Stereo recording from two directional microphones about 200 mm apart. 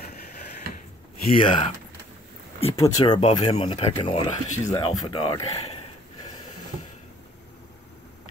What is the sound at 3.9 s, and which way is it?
Grunt, 25° left (ahead or behind).